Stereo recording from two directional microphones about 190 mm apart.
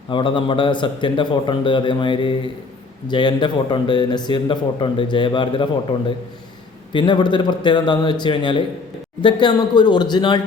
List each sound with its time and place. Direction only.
0.1 s a man's voice: 25° left (ahead or behind)
6.9 s a man's voice: 25° left (ahead or behind)